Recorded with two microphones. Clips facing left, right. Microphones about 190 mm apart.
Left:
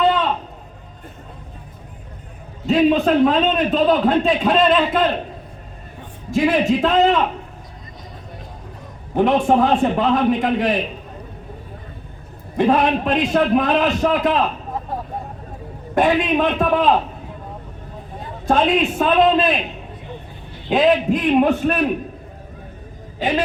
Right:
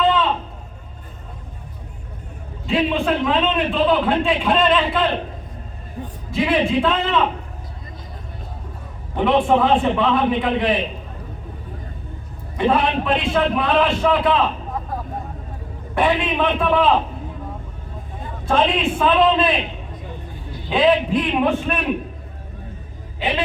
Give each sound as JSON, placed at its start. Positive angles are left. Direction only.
{"t": 0.0, "sound": "a sound", "side_deg": 40}
{"t": 2.6, "sound": "a man's voice", "side_deg": 40}
{"t": 6.3, "sound": "a man's voice", "side_deg": 45}
{"t": 9.1, "sound": "a man's voice", "side_deg": 45}
{"t": 12.5, "sound": "a man's voice", "side_deg": 45}
{"t": 16.0, "sound": "a man's voice", "side_deg": 45}
{"t": 18.2, "sound": "a man's voice", "side_deg": 40}
{"t": 20.7, "sound": "a man's voice", "side_deg": 45}
{"t": 23.2, "sound": "a man's voice", "side_deg": 45}